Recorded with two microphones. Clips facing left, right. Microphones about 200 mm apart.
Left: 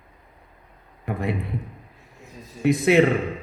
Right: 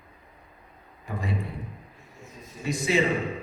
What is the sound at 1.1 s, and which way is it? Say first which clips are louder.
Speech: left 6 dB; 60° left (ahead or behind).